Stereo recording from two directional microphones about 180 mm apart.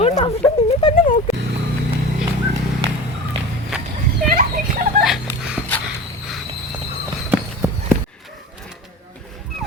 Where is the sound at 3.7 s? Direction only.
5° right (ahead or behind).